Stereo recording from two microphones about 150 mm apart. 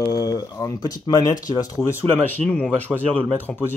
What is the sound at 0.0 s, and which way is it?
Speech, 25° left (ahead or behind).